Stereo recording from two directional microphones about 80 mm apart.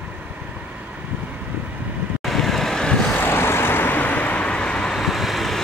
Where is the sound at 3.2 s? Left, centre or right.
Left.